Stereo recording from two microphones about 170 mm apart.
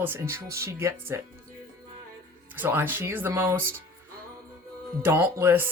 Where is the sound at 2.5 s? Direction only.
10° right (ahead or behind).